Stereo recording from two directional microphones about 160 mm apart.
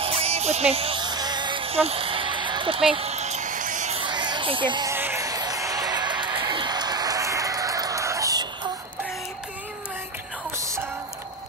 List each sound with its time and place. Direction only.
0.0 s music: 40° right (ahead or behind)
4.0 s a sound: 30° right (ahead or behind)
4.9 s music: 15° right (ahead or behind)